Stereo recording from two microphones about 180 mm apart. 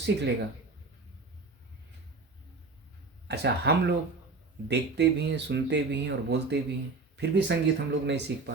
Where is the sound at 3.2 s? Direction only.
65° right (ahead or behind).